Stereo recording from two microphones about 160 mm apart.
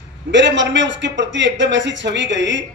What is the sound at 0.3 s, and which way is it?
Speech, 90° right.